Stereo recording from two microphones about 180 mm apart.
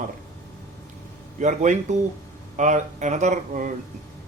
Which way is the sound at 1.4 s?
45° right (ahead or behind).